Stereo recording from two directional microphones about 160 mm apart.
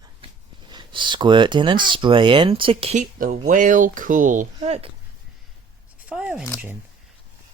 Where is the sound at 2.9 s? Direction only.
55° right (ahead or behind).